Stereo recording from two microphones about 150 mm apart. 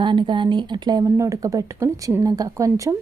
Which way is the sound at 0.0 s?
30° right (ahead or behind).